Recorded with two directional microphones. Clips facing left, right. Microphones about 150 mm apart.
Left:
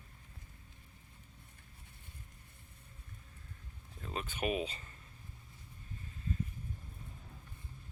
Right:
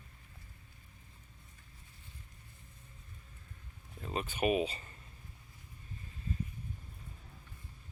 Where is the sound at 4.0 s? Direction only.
5° right (ahead or behind).